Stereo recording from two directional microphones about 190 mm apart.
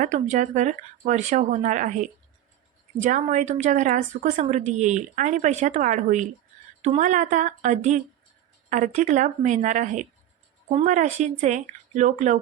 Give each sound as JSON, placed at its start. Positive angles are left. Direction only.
{"t": 0.0, "sound": "a woman's voice", "side_deg": -40}